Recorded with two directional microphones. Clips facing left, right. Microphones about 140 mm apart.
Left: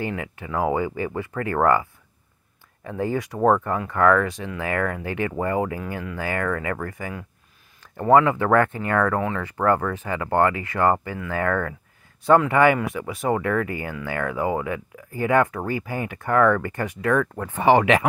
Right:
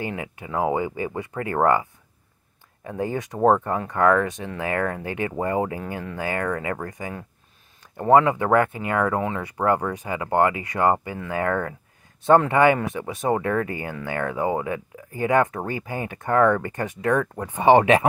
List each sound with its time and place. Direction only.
0.0 s speech: 20° right (ahead or behind)